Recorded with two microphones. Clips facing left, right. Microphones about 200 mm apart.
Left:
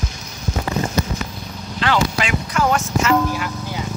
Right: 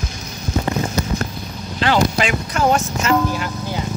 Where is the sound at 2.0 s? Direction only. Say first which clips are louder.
Right 3 dB; 40° right (ahead or behind).